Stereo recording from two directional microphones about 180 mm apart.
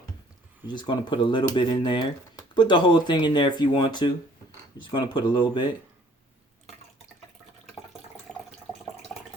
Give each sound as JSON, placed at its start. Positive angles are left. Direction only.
{"t": 0.7, "sound": "speech", "side_deg": 25}
{"t": 8.3, "sound": "water", "side_deg": 5}